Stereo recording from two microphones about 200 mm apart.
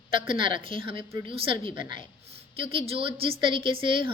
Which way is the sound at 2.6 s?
30° right (ahead or behind).